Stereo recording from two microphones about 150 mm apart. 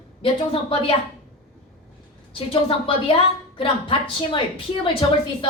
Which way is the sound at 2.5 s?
35° left (ahead or behind).